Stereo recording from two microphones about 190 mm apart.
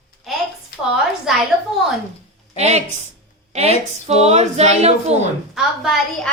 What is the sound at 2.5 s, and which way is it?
Speech, 35° right (ahead or behind).